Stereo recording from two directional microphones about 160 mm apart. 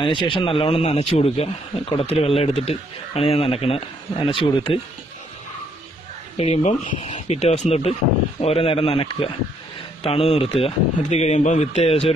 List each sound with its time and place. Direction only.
0.0 s a man's voice: 30° left (ahead or behind)
6.3 s a man's voice: 40° left (ahead or behind)